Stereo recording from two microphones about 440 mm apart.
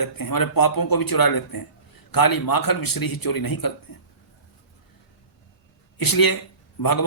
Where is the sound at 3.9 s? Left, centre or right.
Left.